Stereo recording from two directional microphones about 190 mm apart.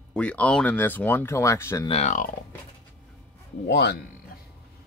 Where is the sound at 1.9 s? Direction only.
35° left (ahead or behind).